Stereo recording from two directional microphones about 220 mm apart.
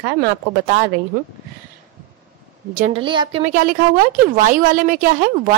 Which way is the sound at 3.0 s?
20° right (ahead or behind).